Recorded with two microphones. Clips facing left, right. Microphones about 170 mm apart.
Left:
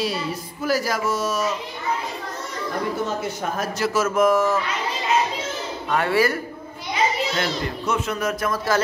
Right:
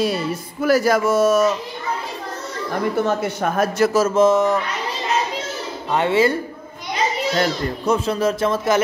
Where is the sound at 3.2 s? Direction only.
60° right (ahead or behind).